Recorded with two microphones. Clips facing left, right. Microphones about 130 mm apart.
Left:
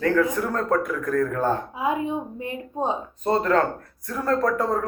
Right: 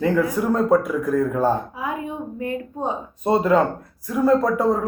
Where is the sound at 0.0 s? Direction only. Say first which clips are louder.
Right 1 dB; 15° right (ahead or behind).